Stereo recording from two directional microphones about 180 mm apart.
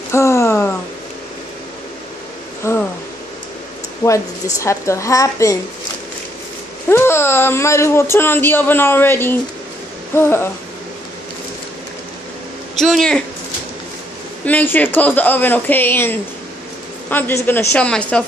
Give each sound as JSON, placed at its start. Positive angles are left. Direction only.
{"t": 0.1, "sound": "a sound", "side_deg": 15}
{"t": 2.6, "sound": "a sound", "side_deg": 15}
{"t": 4.0, "sound": "speech", "side_deg": 15}
{"t": 6.9, "sound": "speech", "side_deg": 15}
{"t": 12.7, "sound": "a woman's voice", "side_deg": 0}
{"t": 14.4, "sound": "a woman's voice", "side_deg": 10}